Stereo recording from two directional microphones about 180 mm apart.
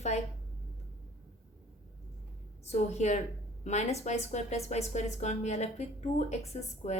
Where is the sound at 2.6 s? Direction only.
35° left (ahead or behind).